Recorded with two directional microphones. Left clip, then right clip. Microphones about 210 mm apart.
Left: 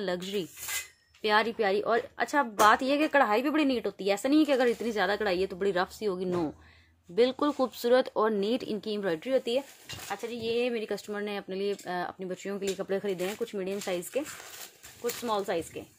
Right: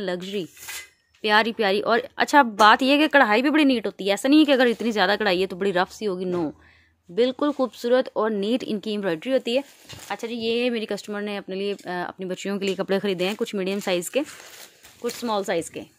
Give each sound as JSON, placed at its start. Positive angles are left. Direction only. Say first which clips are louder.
{"t": 0.0, "sound": "speech", "louder": "right 4 dB", "side_deg": -25}
{"t": 15.2, "sound": "speech", "louder": "right 6 dB", "side_deg": -50}